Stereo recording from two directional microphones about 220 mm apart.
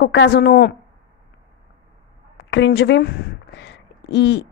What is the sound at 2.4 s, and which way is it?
A woman's voice, 55° left (ahead or behind).